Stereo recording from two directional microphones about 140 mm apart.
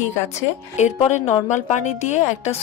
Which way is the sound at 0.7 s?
55° left (ahead or behind).